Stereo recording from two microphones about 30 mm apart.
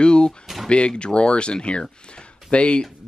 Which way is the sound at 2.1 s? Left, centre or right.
Left.